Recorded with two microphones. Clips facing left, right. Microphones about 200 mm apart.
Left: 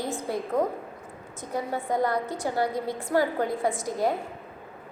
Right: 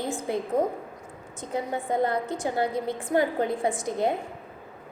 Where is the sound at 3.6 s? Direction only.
Centre (ahead or behind).